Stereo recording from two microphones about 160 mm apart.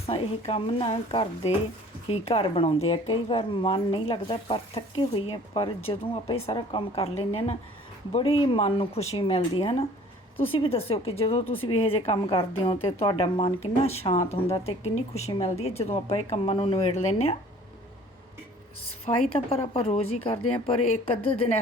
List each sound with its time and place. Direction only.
0.0 s speech: 40° left (ahead or behind)
19.1 s speech: 40° left (ahead or behind)